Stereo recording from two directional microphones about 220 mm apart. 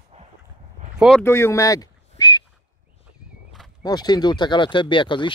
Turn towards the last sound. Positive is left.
turn(degrees=20)  # may be behind; listen again after turning